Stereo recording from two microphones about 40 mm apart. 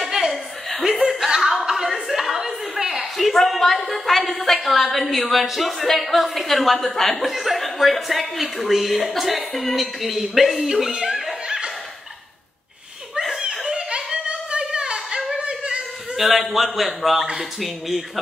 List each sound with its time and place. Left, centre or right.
0.3 s chuckle: centre
2.0 s speech: centre
10.7 s speech: centre
11.4 s laughter: centre
13.7 s a sound: right
16.2 s speech: centre